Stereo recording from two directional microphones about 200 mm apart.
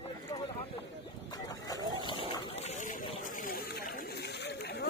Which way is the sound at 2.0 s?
25° left (ahead or behind).